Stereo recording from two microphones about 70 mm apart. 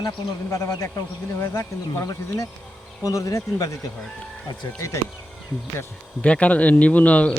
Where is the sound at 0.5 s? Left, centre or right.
Left.